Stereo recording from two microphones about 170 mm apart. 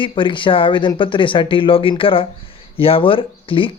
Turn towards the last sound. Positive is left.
turn(degrees=30)  # may be behind; listen again after turning